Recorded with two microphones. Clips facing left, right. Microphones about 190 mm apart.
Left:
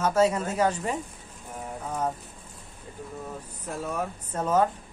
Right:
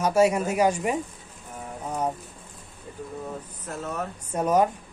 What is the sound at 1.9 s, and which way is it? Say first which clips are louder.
Boat: right 2 dB; 10° right (ahead or behind).